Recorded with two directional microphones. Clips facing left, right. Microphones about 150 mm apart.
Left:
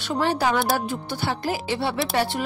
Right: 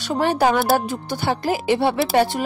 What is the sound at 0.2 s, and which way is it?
Speech, 50° right (ahead or behind).